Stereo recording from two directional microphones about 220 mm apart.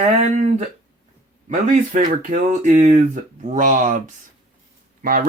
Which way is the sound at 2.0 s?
35° right (ahead or behind).